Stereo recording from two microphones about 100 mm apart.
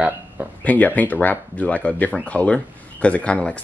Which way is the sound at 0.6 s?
15° left (ahead or behind).